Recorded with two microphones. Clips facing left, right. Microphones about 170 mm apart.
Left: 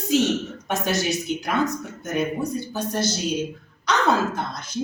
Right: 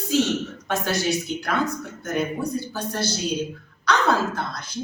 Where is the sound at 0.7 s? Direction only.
20° left (ahead or behind).